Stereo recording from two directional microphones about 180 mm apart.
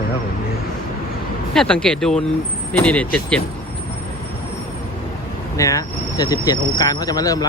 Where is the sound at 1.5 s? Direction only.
5° left (ahead or behind).